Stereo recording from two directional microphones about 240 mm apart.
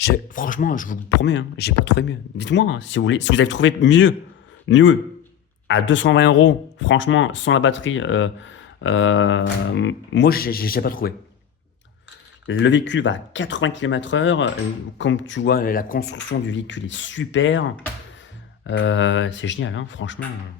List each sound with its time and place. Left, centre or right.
0.0 s speech: left
1.2 s speech: left
12.5 s speech: left